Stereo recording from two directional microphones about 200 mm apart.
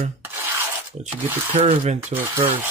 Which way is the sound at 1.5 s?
30° right (ahead or behind).